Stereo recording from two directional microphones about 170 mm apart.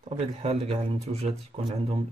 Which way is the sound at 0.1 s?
40° right (ahead or behind).